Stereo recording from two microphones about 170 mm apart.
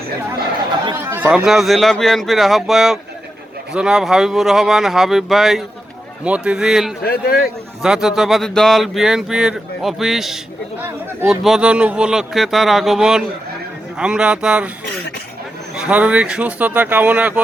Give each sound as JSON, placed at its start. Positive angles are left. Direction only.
{"t": 0.9, "sound": "chatter", "side_deg": -15}
{"t": 1.3, "sound": "speech", "side_deg": 0}
{"t": 7.0, "sound": "a man's voice", "side_deg": 65}
{"t": 7.8, "sound": "speech", "side_deg": -5}
{"t": 15.7, "sound": "speech", "side_deg": -5}